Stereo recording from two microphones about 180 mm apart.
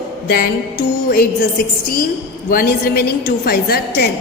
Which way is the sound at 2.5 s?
60° left (ahead or behind).